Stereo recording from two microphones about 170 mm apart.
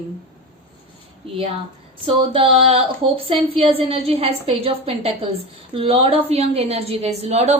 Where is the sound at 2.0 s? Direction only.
30° right (ahead or behind).